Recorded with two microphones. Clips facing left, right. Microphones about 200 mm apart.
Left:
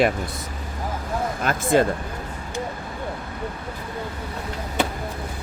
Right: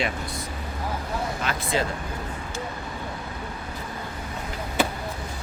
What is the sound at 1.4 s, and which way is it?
Speech, 50° left (ahead or behind).